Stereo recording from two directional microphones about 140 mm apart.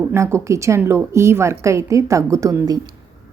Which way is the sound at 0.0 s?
15° right (ahead or behind).